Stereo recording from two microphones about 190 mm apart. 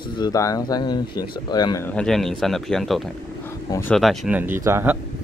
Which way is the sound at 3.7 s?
15° left (ahead or behind).